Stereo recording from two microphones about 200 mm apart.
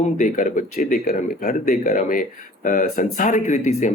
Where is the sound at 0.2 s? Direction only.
40° left (ahead or behind).